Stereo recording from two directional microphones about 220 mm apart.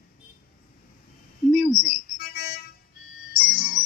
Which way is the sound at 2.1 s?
45° left (ahead or behind).